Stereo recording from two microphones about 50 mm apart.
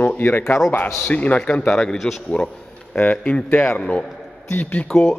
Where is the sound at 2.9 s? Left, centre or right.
Left.